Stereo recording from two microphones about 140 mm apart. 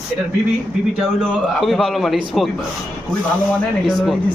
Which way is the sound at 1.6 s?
Centre (ahead or behind).